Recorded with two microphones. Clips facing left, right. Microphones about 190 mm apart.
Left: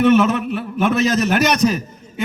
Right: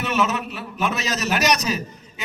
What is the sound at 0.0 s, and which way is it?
A man's voice, 55° left (ahead or behind).